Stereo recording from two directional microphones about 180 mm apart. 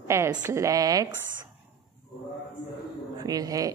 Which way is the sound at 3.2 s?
20° right (ahead or behind).